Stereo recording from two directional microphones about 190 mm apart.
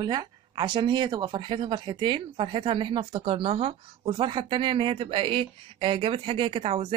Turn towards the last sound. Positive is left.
turn(degrees=-30)  # may be behind; listen again after turning